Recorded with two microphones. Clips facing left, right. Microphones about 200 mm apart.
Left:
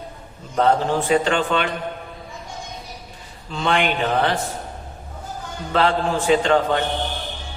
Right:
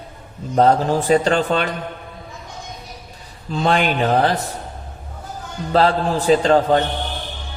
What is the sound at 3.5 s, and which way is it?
Speech, 40° right (ahead or behind).